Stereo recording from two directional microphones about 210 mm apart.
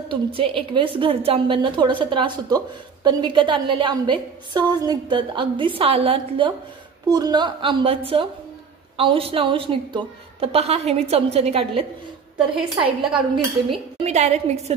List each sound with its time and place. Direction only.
0.1 s a woman's voice: 25° right (ahead or behind)
12.5 s a woman's voice: 5° right (ahead or behind)
14.0 s a woman's voice: 30° right (ahead or behind)